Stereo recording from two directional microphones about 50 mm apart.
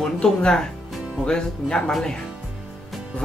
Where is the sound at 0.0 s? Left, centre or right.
Centre.